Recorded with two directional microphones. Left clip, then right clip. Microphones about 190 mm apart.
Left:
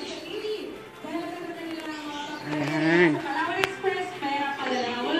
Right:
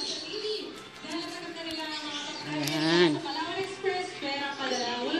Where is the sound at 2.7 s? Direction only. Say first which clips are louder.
Left 3 dB; 10° right (ahead or behind).